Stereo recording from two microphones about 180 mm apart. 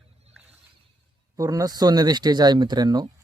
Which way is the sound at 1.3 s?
20° right (ahead or behind).